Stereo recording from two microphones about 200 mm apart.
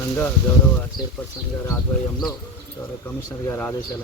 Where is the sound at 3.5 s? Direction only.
10° left (ahead or behind).